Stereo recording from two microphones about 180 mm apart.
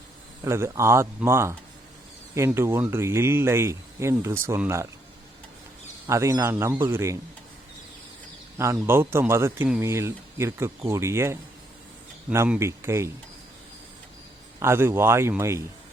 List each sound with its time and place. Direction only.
0.4 s speech: 15° right (ahead or behind)
6.1 s speech: 15° right (ahead or behind)
8.5 s speech: 15° right (ahead or behind)
14.6 s speech: 15° right (ahead or behind)